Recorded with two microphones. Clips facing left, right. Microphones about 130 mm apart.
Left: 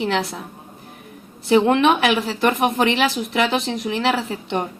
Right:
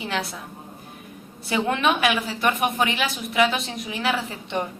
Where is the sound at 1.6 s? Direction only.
75° left (ahead or behind).